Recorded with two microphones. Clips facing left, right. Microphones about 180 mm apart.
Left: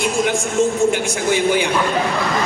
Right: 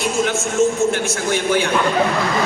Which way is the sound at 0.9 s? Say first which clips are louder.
Left 2 dB; 15° left (ahead or behind).